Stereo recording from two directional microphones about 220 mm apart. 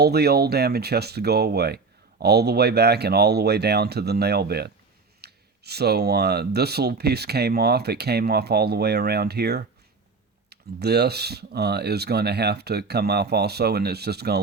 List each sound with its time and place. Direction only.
0.0 s speech: 45° right (ahead or behind)